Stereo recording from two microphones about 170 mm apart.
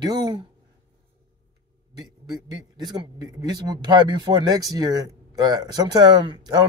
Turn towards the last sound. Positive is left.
turn(degrees=-25)  # may be behind; listen again after turning